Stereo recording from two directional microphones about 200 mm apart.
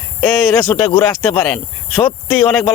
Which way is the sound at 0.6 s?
25° left (ahead or behind).